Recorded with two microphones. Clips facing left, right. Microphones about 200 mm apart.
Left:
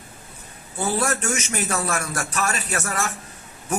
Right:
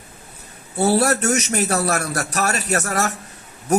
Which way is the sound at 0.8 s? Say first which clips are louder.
Right 7 dB; 40° right (ahead or behind).